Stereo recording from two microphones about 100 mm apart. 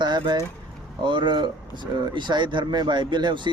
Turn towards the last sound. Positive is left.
turn(degrees=-50)  # may be behind; listen again after turning